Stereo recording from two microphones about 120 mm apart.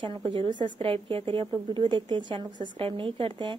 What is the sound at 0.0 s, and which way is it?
A woman's voice, 45° right (ahead or behind).